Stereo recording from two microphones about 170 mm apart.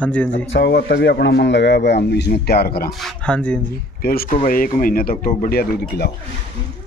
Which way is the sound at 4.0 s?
60° left (ahead or behind).